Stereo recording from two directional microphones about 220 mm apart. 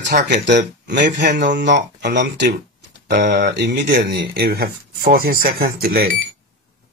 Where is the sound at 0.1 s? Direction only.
45° right (ahead or behind).